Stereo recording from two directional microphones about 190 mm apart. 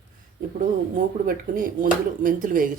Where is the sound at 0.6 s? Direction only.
45° right (ahead or behind).